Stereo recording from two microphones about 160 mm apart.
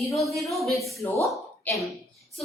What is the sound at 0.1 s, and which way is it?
Speech, centre (ahead or behind).